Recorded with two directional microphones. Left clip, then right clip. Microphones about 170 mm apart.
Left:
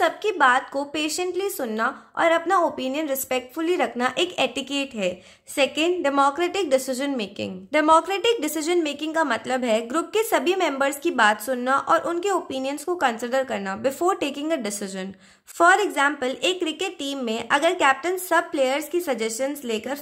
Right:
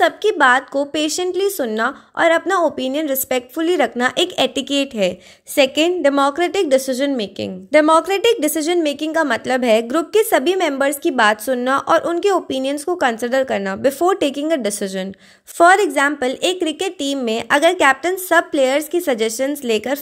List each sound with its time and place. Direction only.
0.0 s a woman's voice: 35° right (ahead or behind)